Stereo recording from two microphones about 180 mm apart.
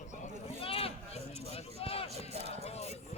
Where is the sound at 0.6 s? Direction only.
30° left (ahead or behind).